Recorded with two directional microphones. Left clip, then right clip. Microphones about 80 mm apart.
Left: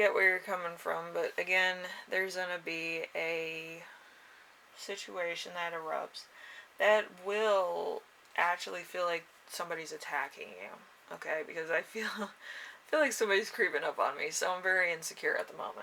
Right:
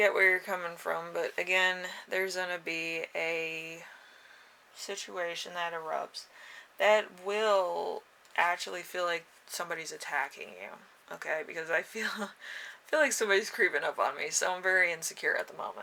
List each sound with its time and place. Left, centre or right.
0.0 s speech: right
4.9 s speech: right